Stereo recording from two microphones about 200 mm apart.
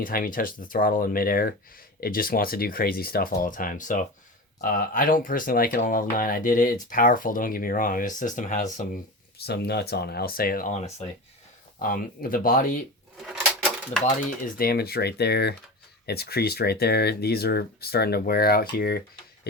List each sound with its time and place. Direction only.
0.0 s speech: 45° left (ahead or behind)
9.5 s speech: 55° left (ahead or behind)
14.6 s speech: 50° left (ahead or behind)